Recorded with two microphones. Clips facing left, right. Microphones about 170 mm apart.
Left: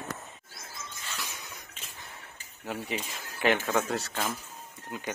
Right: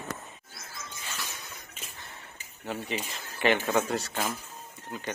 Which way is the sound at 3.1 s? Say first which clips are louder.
Right 1 dB; centre (ahead or behind).